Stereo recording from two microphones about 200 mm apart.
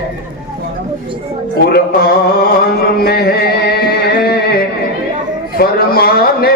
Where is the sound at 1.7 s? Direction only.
50° left (ahead or behind).